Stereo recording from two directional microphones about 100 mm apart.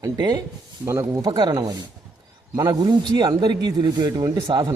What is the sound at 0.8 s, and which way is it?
Speech, 30° right (ahead or behind).